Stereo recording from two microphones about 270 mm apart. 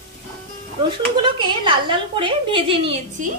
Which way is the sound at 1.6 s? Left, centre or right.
Centre.